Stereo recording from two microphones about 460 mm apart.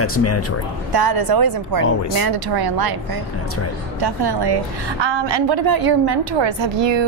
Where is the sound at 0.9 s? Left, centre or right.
Right.